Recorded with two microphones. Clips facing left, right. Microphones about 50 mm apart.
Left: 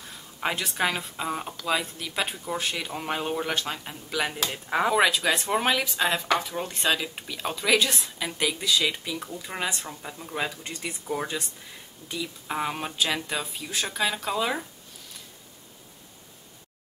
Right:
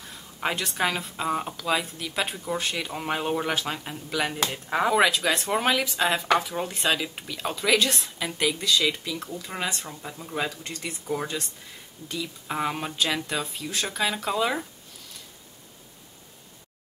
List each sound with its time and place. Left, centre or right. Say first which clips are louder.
0.0 s speech: even; centre
10.6 s speech: even; centre